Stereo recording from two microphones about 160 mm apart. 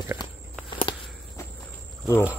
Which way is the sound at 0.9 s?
30° left (ahead or behind).